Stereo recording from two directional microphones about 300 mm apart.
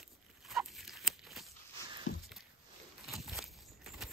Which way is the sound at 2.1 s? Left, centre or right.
Left.